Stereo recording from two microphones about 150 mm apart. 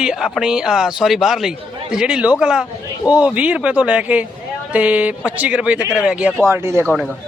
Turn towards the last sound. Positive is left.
turn(degrees=-15)  # may be behind; listen again after turning